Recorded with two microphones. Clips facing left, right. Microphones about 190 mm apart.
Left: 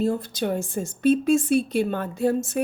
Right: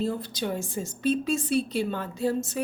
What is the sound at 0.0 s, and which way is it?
A woman's voice, 45° left (ahead or behind).